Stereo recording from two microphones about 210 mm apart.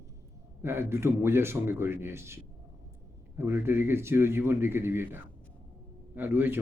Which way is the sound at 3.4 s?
10° right (ahead or behind).